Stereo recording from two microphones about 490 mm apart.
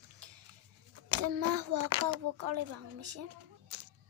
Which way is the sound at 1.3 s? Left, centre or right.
Right.